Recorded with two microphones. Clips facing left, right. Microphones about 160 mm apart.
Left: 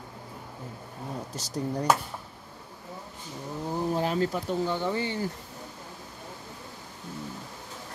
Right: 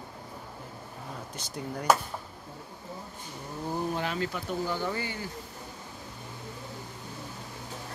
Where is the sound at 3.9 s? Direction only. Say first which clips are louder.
Left 5 dB; 35° left (ahead or behind).